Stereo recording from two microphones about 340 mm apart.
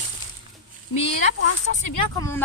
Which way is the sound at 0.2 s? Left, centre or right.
Centre.